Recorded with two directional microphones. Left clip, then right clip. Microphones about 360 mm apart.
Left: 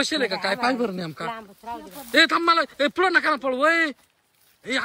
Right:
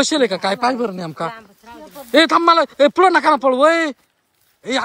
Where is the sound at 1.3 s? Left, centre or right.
Centre.